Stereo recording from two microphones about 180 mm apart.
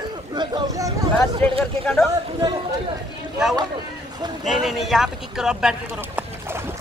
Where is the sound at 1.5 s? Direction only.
Centre (ahead or behind).